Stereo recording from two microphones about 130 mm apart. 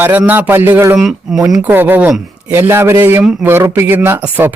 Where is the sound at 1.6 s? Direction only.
15° right (ahead or behind).